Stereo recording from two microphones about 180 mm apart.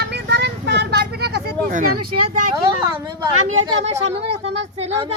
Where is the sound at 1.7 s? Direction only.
45° right (ahead or behind).